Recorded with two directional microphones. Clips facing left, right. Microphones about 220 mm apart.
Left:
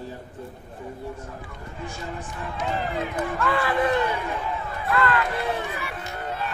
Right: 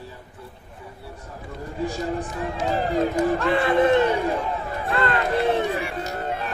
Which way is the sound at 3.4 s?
20° right (ahead or behind).